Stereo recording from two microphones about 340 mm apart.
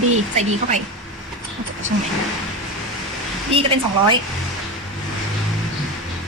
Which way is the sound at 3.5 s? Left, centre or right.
Centre.